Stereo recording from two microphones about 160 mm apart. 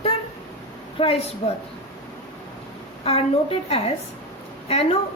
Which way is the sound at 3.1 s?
40° left (ahead or behind).